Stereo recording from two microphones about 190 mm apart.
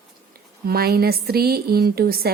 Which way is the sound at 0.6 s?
55° right (ahead or behind).